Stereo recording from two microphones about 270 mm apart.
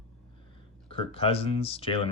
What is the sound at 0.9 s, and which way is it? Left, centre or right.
Speech, left.